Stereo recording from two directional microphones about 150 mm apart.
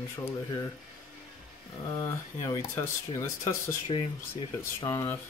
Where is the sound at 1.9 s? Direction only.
25° left (ahead or behind).